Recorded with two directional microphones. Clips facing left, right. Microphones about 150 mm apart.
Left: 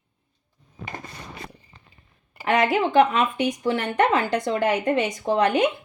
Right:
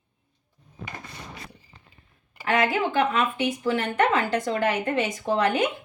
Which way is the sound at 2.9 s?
35° left (ahead or behind).